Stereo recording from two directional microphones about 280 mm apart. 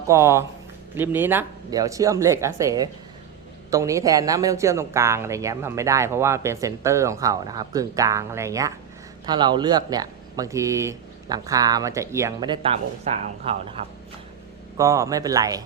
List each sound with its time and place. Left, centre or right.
0.1 s speech: centre
14.8 s speech: centre